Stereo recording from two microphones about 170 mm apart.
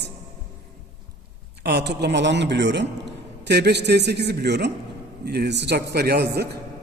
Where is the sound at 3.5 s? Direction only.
80° right.